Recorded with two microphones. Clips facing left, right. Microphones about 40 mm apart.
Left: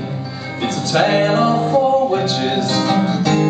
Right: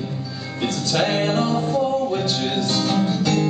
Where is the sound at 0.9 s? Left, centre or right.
Centre.